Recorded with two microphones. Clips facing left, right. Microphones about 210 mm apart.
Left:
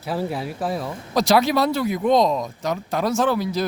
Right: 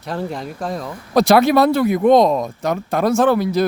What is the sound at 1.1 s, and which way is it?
Speech, 55° right (ahead or behind).